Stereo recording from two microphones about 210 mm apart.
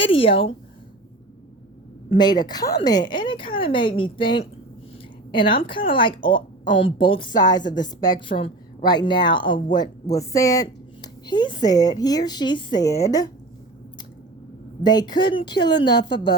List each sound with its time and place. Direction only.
0.2 s a woman's voice: 25° left (ahead or behind)
2.0 s a woman's voice: 20° left (ahead or behind)
14.8 s a woman's voice: 20° left (ahead or behind)